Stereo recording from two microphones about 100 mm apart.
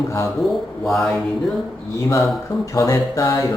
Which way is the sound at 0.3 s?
Centre (ahead or behind).